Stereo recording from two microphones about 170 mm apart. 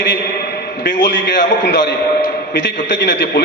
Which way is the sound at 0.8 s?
90° left.